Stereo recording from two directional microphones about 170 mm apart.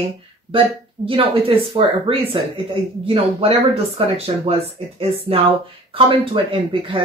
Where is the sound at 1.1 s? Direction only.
30° right (ahead or behind).